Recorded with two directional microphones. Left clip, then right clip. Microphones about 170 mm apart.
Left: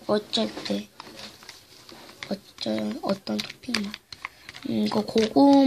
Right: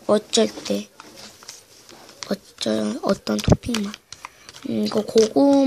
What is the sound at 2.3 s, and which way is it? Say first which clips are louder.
Speech: right 6 dB; 35° right (ahead or behind).